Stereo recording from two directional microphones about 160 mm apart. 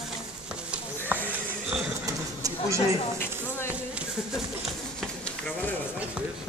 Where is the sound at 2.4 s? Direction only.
20° right (ahead or behind).